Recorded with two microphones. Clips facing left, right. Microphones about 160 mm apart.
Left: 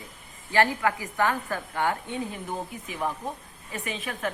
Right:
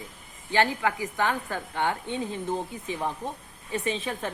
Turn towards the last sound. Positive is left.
turn(degrees=-30)  # may be behind; listen again after turning